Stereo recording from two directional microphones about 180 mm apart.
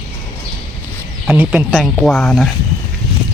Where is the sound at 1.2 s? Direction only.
10° right (ahead or behind).